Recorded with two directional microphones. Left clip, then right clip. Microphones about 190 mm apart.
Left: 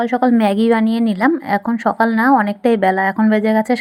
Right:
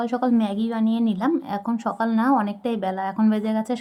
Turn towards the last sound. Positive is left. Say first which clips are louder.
# left 10 dB
turn(degrees=20)  # may be behind; listen again after turning